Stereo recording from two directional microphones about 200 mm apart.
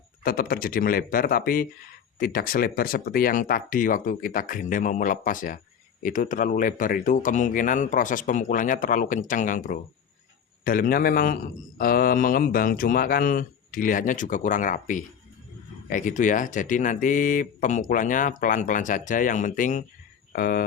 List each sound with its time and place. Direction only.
0.2 s speech: 45° left (ahead or behind)